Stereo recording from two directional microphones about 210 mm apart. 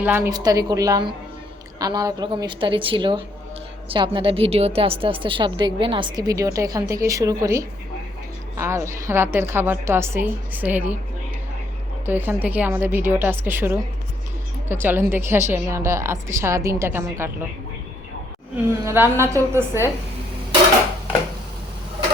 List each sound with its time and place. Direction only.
0.0 s a woman's voice: 10° right (ahead or behind)
12.0 s a woman's voice: 10° right (ahead or behind)
18.9 s a woman's voice: 10° right (ahead or behind)